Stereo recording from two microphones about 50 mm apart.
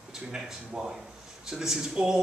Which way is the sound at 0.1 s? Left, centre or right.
Centre.